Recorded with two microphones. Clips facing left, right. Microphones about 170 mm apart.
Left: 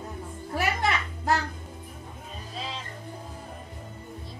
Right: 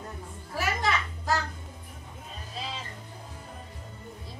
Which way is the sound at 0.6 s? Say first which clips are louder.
Left 2 dB; 60° left (ahead or behind).